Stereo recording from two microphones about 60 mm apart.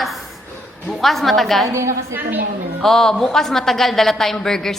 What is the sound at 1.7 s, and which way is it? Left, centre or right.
Speech, right.